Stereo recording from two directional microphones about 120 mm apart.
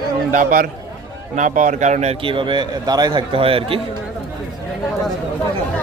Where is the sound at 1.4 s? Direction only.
90° right; by 2.1 s 70° right (ahead or behind).